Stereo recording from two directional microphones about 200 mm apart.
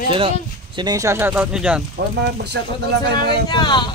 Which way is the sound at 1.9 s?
55° right (ahead or behind).